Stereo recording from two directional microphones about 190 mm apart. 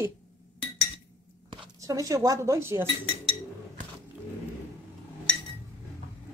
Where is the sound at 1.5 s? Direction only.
20° right (ahead or behind).